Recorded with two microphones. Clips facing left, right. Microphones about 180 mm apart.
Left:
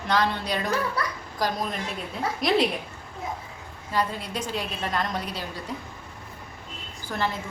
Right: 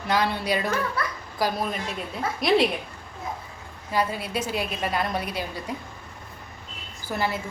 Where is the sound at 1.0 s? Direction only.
35° left (ahead or behind).